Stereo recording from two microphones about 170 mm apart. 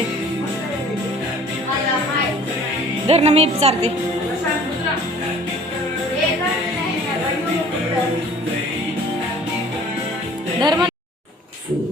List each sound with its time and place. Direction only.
3.1 s a woman's voice: 40° right (ahead or behind)
10.6 s speech: 25° right (ahead or behind)